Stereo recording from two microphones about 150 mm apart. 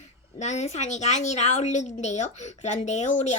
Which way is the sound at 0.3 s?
50° left (ahead or behind).